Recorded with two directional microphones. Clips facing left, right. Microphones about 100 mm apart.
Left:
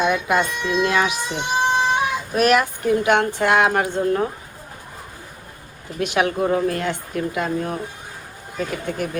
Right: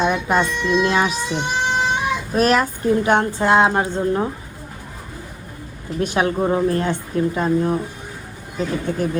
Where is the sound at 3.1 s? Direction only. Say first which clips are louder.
Right 2 dB; 25° right (ahead or behind).